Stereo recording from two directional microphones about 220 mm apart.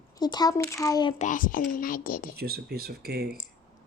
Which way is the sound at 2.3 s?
45° right (ahead or behind).